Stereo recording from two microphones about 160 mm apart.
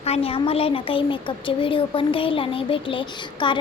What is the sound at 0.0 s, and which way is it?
A woman's voice, 40° left (ahead or behind).